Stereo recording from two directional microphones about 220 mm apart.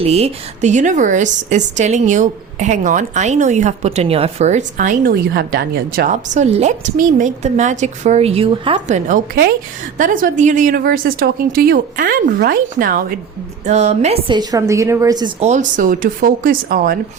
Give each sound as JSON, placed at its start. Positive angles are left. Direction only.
{"t": 0.0, "sound": "a woman's voice", "side_deg": -30}
{"t": 15.4, "sound": "a woman's voice", "side_deg": -30}